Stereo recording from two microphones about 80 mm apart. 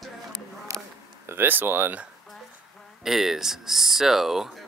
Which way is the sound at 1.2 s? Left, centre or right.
Right.